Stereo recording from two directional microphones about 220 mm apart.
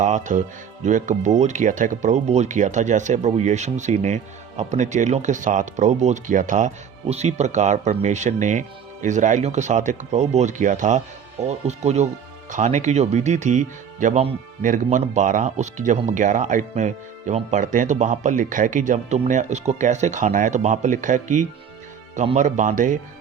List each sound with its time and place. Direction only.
0.0 s speech: 35° right (ahead or behind)